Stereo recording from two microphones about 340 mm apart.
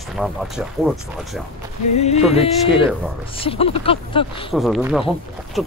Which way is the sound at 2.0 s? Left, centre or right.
Centre.